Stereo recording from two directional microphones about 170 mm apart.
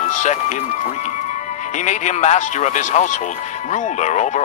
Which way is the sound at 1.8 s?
45° left (ahead or behind).